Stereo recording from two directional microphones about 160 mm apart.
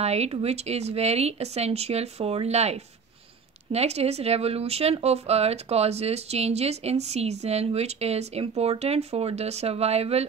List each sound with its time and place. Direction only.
0.0 s speech: 40° right (ahead or behind)